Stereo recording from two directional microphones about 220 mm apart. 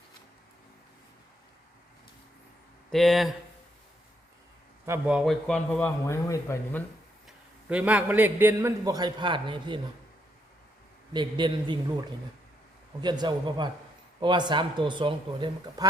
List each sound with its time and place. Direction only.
2.9 s a man's voice: centre (ahead or behind)
4.9 s a man's voice: 5° right (ahead or behind); by 6.8 s 15° left (ahead or behind)
7.7 s a man's voice: 5° right (ahead or behind); by 9.8 s 20° right (ahead or behind)
11.1 s a man's voice: 20° right (ahead or behind)